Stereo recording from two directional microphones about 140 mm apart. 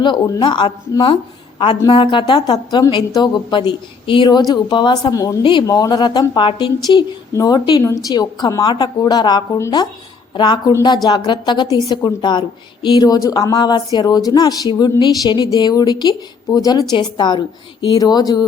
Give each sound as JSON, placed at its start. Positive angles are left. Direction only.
{"t": 0.0, "sound": "a woman's voice", "side_deg": 30}
{"t": 10.3, "sound": "a woman's voice", "side_deg": 35}